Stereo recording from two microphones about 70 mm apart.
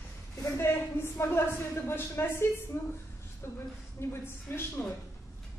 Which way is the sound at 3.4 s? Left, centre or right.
Left.